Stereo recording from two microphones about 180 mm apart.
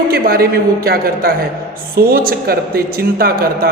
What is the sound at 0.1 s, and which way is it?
Speech, 60° right (ahead or behind).